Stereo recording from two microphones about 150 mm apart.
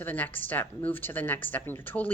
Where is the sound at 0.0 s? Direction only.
15° left (ahead or behind).